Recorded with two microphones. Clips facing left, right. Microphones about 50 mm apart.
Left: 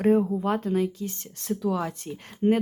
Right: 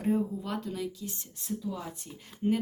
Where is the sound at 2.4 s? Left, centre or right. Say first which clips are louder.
Left 6 dB; left.